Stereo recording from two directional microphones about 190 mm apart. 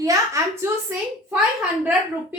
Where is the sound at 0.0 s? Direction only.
15° right (ahead or behind).